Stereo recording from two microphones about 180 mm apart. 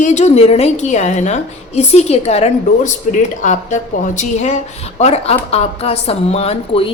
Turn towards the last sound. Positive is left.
turn(degrees=35)  # may be behind; listen again after turning